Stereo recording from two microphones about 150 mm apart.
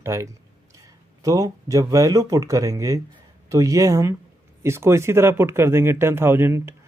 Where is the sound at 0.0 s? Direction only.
20° right (ahead or behind).